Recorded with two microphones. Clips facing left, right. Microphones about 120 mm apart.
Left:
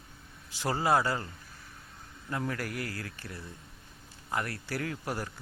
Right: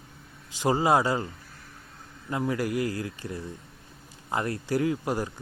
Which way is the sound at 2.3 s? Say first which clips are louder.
Right 7 dB; 20° right (ahead or behind).